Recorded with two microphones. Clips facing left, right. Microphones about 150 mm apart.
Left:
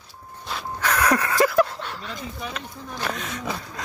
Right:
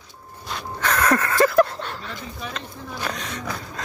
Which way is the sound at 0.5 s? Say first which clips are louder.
Right 1 dB; 5° left (ahead or behind).